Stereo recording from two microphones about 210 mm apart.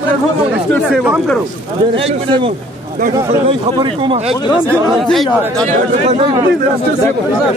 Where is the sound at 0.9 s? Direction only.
5° right (ahead or behind).